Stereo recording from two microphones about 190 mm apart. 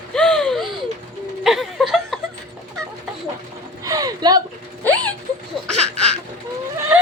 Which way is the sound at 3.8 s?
20° right (ahead or behind).